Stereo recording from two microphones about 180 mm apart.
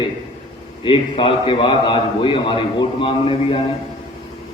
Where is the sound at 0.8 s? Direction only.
30° left (ahead or behind).